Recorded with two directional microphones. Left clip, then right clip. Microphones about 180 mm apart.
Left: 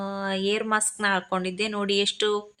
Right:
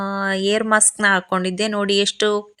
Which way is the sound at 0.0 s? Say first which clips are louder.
Right 7 dB; 35° right (ahead or behind).